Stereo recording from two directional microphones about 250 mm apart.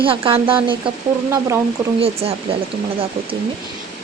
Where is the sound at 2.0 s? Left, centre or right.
Right.